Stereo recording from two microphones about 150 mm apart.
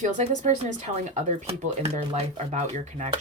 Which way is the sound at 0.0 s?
55° right (ahead or behind).